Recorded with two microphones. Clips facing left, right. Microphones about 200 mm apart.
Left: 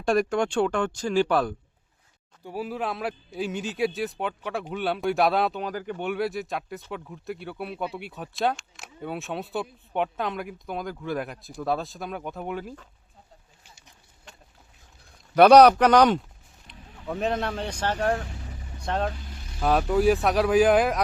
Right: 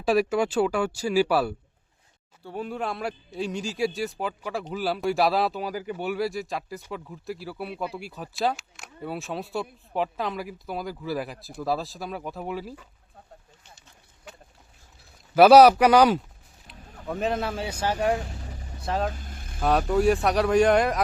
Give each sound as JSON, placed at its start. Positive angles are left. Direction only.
{"t": 0.0, "sound": "speech", "side_deg": -5}
{"t": 2.4, "sound": "speech", "side_deg": 10}
{"t": 15.4, "sound": "speech", "side_deg": -5}
{"t": 19.1, "sound": "vehicle", "side_deg": -50}
{"t": 19.5, "sound": "speech", "side_deg": 0}